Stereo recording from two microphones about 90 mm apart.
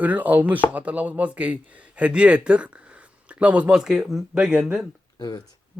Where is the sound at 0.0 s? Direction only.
20° right (ahead or behind).